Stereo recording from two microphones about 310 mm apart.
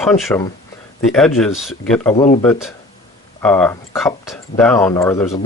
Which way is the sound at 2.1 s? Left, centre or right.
Left.